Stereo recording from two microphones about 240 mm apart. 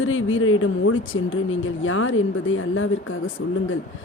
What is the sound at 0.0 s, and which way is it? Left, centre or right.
Speech, left.